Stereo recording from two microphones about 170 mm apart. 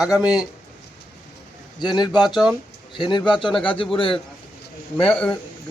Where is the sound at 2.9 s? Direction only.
30° left (ahead or behind).